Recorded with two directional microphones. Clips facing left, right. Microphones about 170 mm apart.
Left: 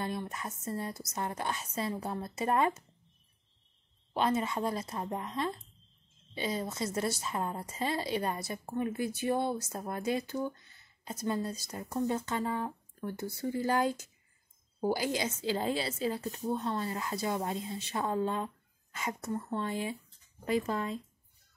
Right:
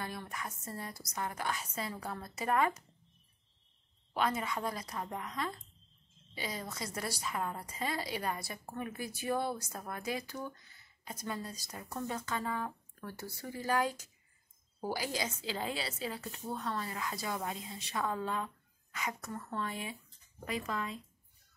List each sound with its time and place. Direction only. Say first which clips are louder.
0.0 s a woman's voice: left 5 dB; 25° left (ahead or behind)
4.1 s a woman's voice: left 4 dB; 25° left (ahead or behind)
16.4 s a woman's voice: left 5 dB; 25° left (ahead or behind)